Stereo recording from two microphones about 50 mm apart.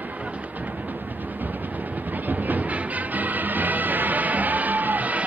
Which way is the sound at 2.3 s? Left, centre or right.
Right.